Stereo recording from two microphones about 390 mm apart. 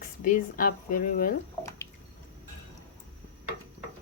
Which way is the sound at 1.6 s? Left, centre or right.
Centre.